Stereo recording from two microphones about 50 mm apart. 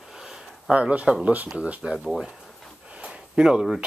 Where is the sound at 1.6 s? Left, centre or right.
Right.